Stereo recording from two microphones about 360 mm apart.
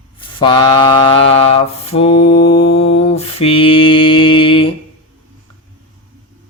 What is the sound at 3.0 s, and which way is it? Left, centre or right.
Mantra, centre.